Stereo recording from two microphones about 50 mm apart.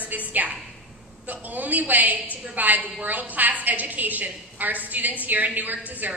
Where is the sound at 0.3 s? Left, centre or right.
Right.